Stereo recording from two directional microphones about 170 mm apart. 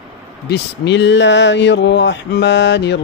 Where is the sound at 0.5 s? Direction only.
90° left.